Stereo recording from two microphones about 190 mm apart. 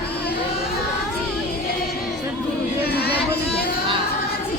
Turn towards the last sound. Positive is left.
turn(degrees=55)  # may be behind; listen again after turning